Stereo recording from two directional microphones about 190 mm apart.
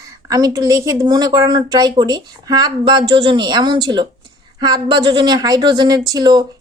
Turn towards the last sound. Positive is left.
turn(degrees=-20)  # may be behind; listen again after turning